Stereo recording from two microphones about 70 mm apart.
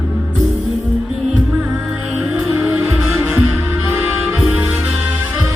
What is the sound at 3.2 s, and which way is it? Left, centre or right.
Music, right.